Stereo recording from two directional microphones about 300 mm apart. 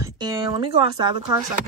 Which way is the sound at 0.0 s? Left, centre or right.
Centre.